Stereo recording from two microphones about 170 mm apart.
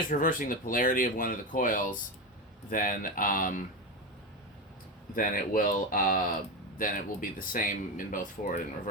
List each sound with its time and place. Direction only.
0.1 s speech: 50° left (ahead or behind)
5.1 s speech: 55° left (ahead or behind)